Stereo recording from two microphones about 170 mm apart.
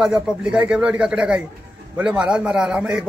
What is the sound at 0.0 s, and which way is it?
A man's voice, 5° right (ahead or behind).